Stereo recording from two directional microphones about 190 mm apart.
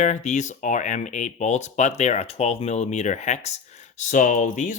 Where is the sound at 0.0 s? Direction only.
40° left (ahead or behind).